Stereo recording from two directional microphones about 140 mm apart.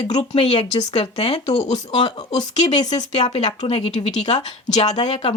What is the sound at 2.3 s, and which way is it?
Speech, 30° left (ahead or behind).